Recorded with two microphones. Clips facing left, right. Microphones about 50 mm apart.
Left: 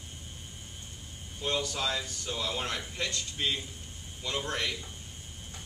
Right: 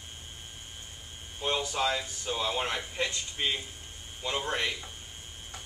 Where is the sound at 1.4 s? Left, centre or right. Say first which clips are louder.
Right 2 dB; right.